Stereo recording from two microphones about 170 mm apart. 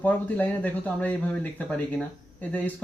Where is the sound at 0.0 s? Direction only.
10° left (ahead or behind).